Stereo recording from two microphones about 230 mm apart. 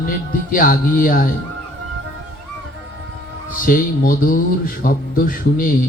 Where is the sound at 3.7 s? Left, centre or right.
Left.